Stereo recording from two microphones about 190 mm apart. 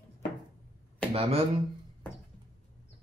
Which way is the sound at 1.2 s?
30° right (ahead or behind).